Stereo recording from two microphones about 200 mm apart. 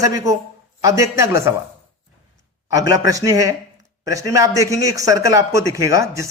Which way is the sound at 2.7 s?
15° right (ahead or behind).